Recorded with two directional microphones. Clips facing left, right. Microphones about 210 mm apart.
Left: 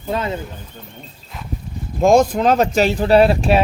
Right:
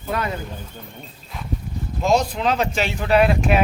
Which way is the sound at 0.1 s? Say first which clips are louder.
Left 3 dB; 25° left (ahead or behind).